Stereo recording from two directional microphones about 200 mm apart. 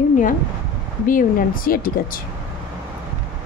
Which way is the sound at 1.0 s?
45° left (ahead or behind).